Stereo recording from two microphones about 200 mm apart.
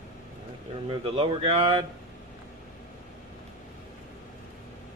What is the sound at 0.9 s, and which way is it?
Speech, 25° right (ahead or behind).